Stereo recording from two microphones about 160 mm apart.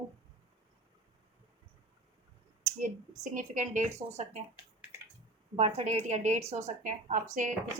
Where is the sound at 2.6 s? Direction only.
50° right (ahead or behind).